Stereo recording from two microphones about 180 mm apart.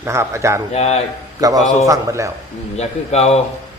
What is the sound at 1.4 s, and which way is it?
Speech, 20° right (ahead or behind).